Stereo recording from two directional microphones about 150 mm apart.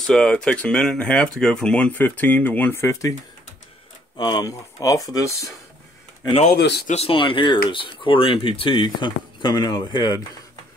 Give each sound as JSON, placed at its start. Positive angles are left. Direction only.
{"t": 0.0, "sound": "speech", "side_deg": 5}
{"t": 4.2, "sound": "speech", "side_deg": 25}
{"t": 6.5, "sound": "speech", "side_deg": 90}
{"t": 6.9, "sound": "speech", "side_deg": 40}